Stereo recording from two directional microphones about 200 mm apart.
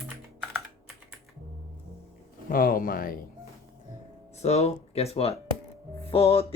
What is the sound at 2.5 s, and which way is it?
Speech, 45° left (ahead or behind).